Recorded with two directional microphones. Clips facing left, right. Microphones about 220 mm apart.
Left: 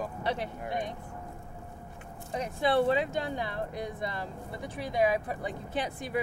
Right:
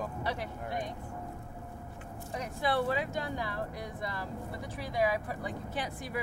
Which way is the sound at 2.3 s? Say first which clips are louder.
Left 4 dB; 25° left (ahead or behind).